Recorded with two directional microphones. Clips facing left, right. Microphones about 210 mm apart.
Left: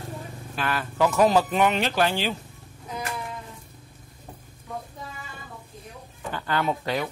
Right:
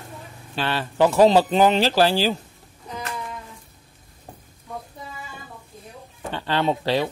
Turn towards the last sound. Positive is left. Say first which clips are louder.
# right 5 dB
turn(degrees=-30)  # may be behind; listen again after turning